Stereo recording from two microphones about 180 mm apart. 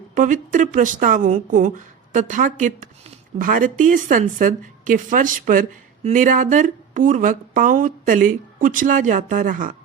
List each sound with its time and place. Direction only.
0.1 s speech: 45° right (ahead or behind)